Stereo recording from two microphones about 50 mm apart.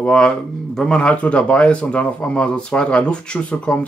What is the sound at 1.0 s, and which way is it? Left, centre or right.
Speech, left.